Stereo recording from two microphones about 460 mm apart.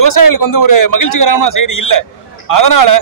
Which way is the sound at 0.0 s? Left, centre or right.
Left.